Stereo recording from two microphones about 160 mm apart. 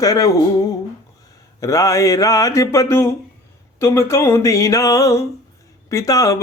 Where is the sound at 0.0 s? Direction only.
20° left (ahead or behind).